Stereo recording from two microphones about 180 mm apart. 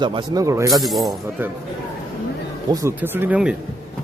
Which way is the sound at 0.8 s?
Centre (ahead or behind).